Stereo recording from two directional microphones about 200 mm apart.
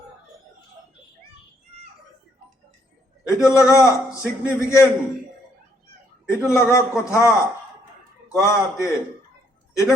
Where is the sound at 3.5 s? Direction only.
15° left (ahead or behind).